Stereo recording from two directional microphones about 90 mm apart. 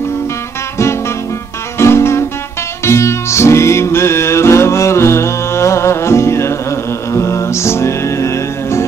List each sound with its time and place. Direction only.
1.8 s guitar: 30° left (ahead or behind)
2.8 s music: 30° left (ahead or behind)